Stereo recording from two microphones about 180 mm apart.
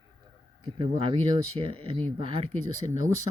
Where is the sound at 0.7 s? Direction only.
30° right (ahead or behind).